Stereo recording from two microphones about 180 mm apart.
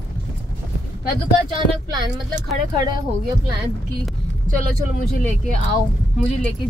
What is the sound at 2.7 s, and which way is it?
Speech, 25° right (ahead or behind).